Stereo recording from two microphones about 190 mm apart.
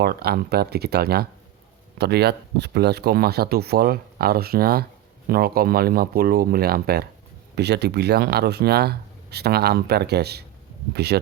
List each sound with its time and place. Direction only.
0.0 s speech: 55° right (ahead or behind)